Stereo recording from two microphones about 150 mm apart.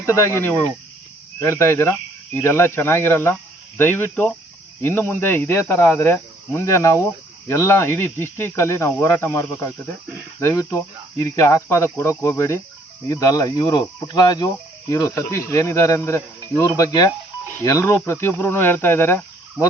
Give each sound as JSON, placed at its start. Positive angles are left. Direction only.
{"t": 0.0, "sound": "speech", "side_deg": 15}